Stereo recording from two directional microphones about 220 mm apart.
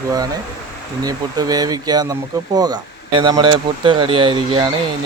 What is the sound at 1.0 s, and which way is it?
Speech, 15° right (ahead or behind).